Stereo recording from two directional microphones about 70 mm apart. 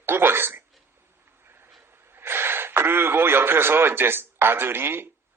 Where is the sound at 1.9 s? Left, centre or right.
Right.